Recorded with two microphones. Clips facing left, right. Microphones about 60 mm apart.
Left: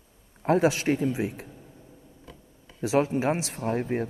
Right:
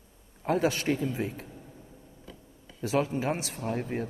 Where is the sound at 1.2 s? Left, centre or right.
Left.